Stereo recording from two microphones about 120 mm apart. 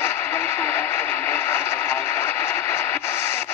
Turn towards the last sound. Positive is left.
turn(degrees=20)  # may be behind; listen again after turning